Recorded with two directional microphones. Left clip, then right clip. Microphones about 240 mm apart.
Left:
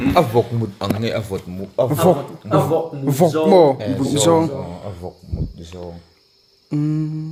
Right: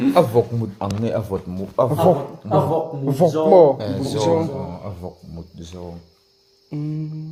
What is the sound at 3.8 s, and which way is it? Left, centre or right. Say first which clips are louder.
Speech: left 3 dB; centre.